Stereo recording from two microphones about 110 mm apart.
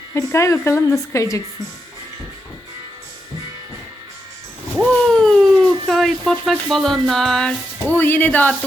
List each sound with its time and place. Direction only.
0.1 s a woman's voice: 25° left (ahead or behind)
4.8 s a sound: 5° left (ahead or behind)
5.9 s speech: centre (ahead or behind)
7.9 s speech: 15° left (ahead or behind)